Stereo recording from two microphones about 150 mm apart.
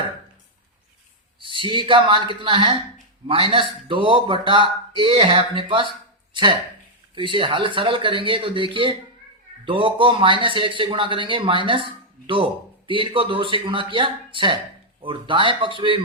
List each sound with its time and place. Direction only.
1.4 s speech: 35° right (ahead or behind)